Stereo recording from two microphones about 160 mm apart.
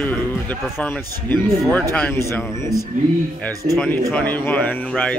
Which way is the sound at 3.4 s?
5° left (ahead or behind).